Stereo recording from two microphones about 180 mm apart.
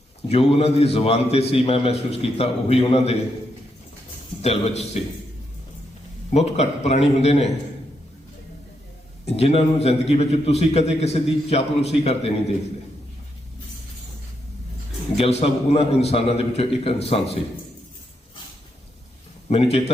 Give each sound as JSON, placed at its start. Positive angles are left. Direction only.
{"t": 0.3, "sound": "a man's voice", "side_deg": 35}
{"t": 4.4, "sound": "a man's voice", "side_deg": 35}
{"t": 6.3, "sound": "a man's voice", "side_deg": 40}
{"t": 9.2, "sound": "a man's voice", "side_deg": 35}
{"t": 15.1, "sound": "a man's voice", "side_deg": 35}
{"t": 19.5, "sound": "a man's voice", "side_deg": 35}